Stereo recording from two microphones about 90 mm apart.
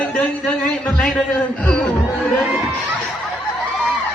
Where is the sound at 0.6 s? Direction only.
15° left (ahead or behind).